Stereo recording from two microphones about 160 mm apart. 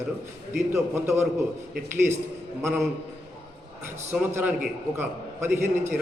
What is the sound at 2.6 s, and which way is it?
Speech, centre (ahead or behind).